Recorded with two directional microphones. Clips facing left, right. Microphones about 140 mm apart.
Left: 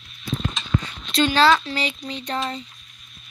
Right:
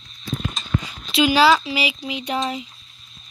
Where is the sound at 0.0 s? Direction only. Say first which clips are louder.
Even; 30° right (ahead or behind).